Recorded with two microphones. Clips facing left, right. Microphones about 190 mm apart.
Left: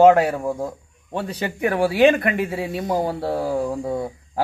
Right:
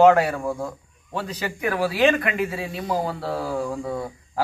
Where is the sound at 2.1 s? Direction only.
45° left (ahead or behind).